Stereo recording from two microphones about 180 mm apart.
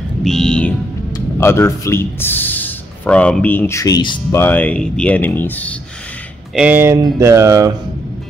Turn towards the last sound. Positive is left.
turn(degrees=-15)  # may be behind; listen again after turning